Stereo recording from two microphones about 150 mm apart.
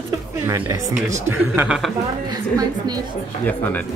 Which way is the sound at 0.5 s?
20° right (ahead or behind).